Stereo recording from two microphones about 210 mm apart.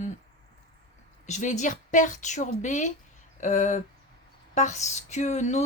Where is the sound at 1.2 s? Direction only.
35° left (ahead or behind).